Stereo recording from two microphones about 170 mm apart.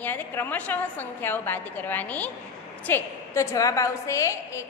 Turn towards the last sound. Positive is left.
turn(degrees=15)  # may be behind; listen again after turning